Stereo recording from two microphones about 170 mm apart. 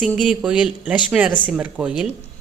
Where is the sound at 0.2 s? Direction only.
5° right (ahead or behind).